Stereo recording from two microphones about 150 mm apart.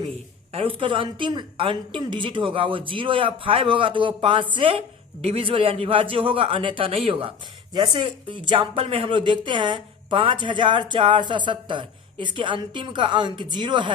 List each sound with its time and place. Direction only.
0.5 s a man's voice: 35° right (ahead or behind)